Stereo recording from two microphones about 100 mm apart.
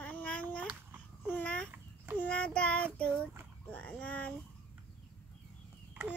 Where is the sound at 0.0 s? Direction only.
10° left (ahead or behind).